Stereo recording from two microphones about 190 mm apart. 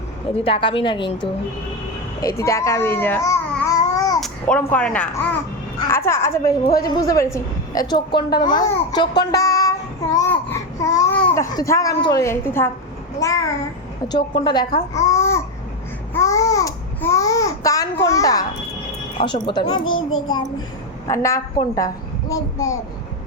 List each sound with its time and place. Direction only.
0.4 s speech: 30° left (ahead or behind)
2.2 s speech: 15° left (ahead or behind)
4.2 s a woman's voice: 5° left (ahead or behind)
16.1 s babbling: 15° left (ahead or behind)
19.1 s speech: 25° left (ahead or behind)
19.8 s a child's voice: 90° left
21.1 s a woman's voice: 15° left (ahead or behind)